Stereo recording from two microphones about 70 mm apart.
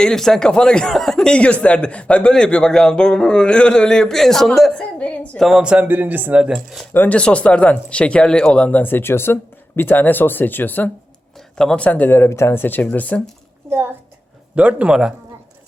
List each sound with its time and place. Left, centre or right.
0.0 s speech: centre
4.8 s a sound: centre
5.4 s speech: centre
5.6 s speech: centre
6.5 s speech: centre
6.9 s speech: left
7.2 s speech: centre
11.3 s a sound: centre
11.8 s speech: left
13.7 s a woman's voice: right
14.5 s speech: centre